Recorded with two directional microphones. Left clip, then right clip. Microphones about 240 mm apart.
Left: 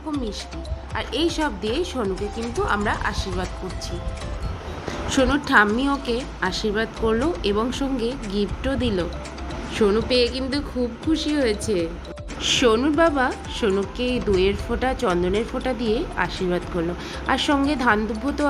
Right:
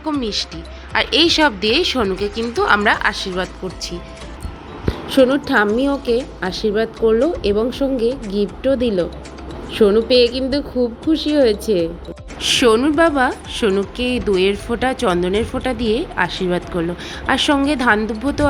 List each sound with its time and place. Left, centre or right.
0.1 s a woman's voice: centre
5.0 s a woman's voice: centre